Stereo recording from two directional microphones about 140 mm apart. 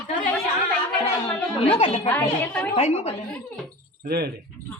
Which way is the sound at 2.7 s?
50° left (ahead or behind).